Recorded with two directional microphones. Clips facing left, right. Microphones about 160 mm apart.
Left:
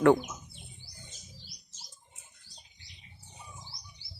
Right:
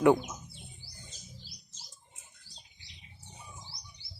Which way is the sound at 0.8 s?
35° right (ahead or behind).